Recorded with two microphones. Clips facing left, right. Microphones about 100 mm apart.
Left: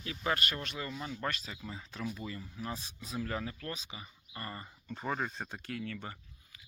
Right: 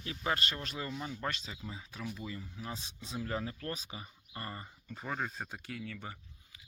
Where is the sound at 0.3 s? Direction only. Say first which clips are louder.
Left 1 dB; 25° right (ahead or behind).